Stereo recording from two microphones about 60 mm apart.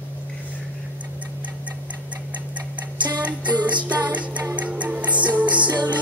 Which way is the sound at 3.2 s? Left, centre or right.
Right.